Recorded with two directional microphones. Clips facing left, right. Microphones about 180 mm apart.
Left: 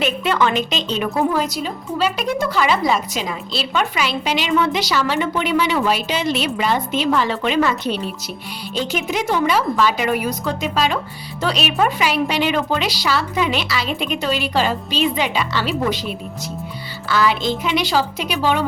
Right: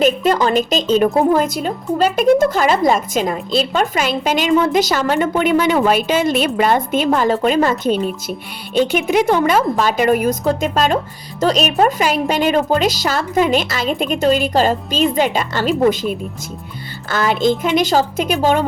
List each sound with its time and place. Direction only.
0.0 s a woman's voice: 40° right (ahead or behind)